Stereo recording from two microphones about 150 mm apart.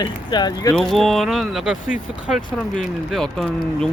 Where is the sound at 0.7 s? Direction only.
Centre (ahead or behind).